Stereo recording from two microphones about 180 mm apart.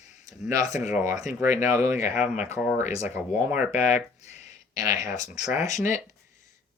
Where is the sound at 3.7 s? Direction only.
40° left (ahead or behind).